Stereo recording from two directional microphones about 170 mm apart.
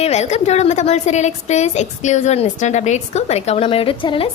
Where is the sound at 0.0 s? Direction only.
40° left (ahead or behind).